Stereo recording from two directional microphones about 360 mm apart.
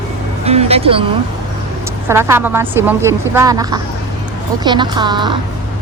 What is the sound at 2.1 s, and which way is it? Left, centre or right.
A woman's voice, centre.